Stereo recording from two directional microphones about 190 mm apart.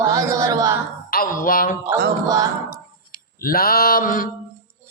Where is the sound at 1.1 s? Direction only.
50° left (ahead or behind).